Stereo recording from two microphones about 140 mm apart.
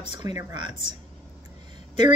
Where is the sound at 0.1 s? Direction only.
30° right (ahead or behind).